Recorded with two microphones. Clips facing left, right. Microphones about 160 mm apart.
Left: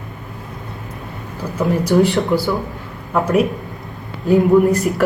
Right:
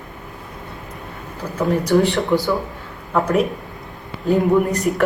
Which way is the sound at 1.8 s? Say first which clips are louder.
Left 3 dB; 20° left (ahead or behind).